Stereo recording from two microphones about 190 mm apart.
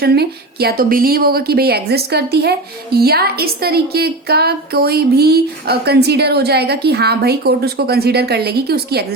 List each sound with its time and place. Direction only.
0.0 s a woman's voice: 55° right (ahead or behind)